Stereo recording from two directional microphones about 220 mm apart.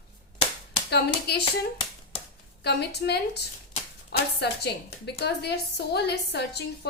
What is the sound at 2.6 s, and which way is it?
Speech, 50° left (ahead or behind).